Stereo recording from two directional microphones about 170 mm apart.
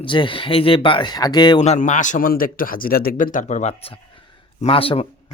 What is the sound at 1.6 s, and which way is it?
A man's voice, 45° left (ahead or behind).